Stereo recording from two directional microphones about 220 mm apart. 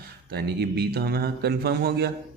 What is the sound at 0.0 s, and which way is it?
A man's voice, 45° right (ahead or behind).